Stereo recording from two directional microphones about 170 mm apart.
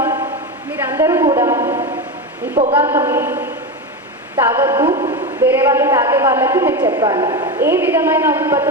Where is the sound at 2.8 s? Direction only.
15° right (ahead or behind).